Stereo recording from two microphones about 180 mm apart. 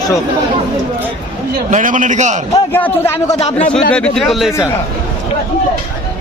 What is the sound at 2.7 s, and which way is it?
A man's voice, 10° left (ahead or behind).